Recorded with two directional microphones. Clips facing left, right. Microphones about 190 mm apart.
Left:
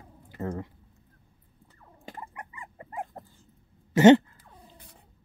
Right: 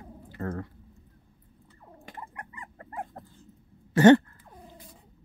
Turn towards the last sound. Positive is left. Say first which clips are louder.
# left 1 dB
turn(degrees=20)  # may be behind; listen again after turning